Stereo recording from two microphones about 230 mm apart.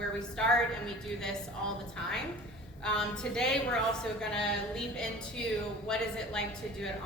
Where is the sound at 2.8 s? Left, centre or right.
Centre.